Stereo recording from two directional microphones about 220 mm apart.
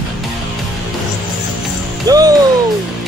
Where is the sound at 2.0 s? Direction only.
15° right (ahead or behind).